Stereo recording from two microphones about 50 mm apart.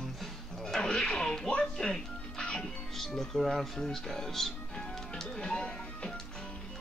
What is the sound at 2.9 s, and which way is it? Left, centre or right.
Speech, centre.